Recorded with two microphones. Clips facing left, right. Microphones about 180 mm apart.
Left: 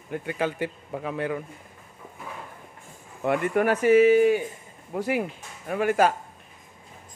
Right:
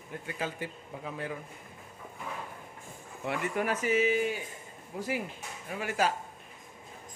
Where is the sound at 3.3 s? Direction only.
60° left (ahead or behind).